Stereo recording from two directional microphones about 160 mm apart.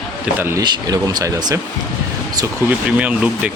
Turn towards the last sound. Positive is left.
turn(degrees=-10)  # may be behind; listen again after turning